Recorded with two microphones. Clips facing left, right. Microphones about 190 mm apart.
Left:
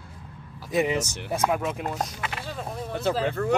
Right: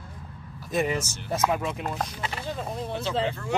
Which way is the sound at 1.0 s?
65° left (ahead or behind).